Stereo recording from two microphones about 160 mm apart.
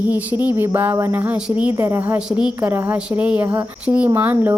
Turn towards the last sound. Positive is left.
turn(degrees=-10)  # may be behind; listen again after turning